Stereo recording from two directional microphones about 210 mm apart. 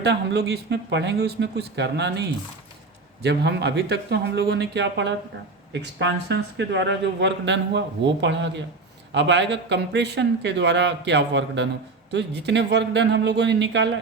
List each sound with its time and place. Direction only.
0.0 s speech: 55° right (ahead or behind)